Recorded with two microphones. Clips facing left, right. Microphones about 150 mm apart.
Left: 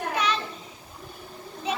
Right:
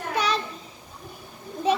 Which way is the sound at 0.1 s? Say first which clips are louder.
Right 2 dB; 35° right (ahead or behind).